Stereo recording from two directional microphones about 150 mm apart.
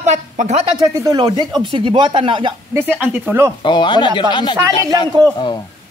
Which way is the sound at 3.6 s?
30° left (ahead or behind).